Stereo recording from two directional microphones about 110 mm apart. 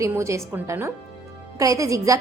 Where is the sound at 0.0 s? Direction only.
25° right (ahead or behind).